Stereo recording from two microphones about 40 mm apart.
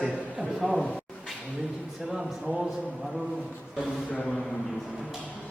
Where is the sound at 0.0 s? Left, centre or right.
Centre.